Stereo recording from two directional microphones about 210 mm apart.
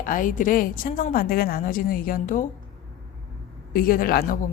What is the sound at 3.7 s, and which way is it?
Speech, 45° left (ahead or behind).